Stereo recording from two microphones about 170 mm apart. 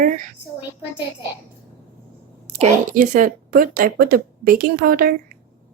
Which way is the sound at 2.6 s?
50° right (ahead or behind).